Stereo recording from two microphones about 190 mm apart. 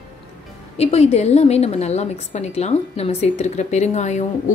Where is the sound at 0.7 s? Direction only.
35° left (ahead or behind).